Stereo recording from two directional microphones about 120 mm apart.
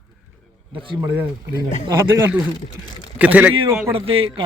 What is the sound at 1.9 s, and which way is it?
A man's voice, 25° right (ahead or behind).